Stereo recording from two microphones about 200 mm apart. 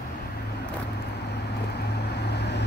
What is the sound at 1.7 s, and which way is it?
Vehicle, 55° left (ahead or behind).